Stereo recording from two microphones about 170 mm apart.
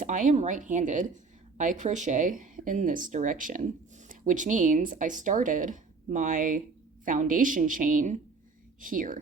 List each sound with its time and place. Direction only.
0.0 s speech: 50° right (ahead or behind)